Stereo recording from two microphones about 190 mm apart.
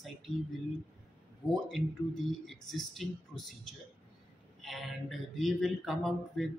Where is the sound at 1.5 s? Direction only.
Centre (ahead or behind).